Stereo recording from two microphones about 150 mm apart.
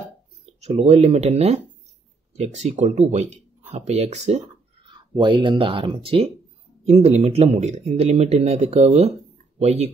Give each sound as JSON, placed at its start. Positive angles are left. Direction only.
{"t": 0.6, "sound": "speech", "side_deg": -45}
{"t": 4.8, "sound": "speech", "side_deg": -30}